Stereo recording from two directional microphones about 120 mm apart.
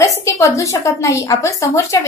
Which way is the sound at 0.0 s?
25° left (ahead or behind).